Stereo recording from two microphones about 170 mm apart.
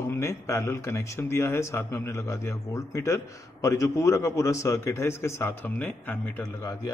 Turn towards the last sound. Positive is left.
turn(degrees=20)  # may be behind; listen again after turning